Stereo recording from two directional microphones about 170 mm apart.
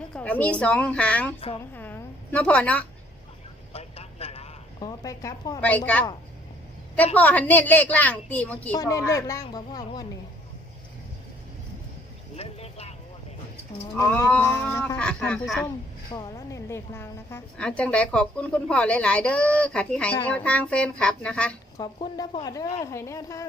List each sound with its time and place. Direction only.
0.1 s a woman's voice: 10° left (ahead or behind)
1.4 s a woman's voice: 35° left (ahead or behind)
1.7 s a sound: 10° left (ahead or behind)
3.7 s a sound: 35° left (ahead or behind)
4.8 s a woman's voice: 20° left (ahead or behind)
7.2 s a woman's voice: 10° left (ahead or behind)
12.4 s vehicle: 35° left (ahead or behind)
13.9 s a woman's voice: 15° left (ahead or behind)
16.1 s a woman's voice: 20° left (ahead or behind)
21.8 s a woman's voice: 25° left (ahead or behind)